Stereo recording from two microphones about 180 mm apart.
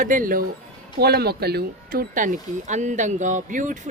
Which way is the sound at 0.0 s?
50° right (ahead or behind).